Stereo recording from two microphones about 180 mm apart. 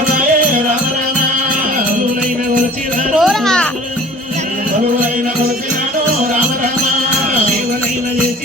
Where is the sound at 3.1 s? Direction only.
Centre (ahead or behind).